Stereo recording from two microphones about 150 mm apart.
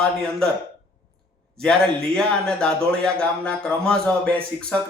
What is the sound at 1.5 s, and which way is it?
Speech, 5° left (ahead or behind).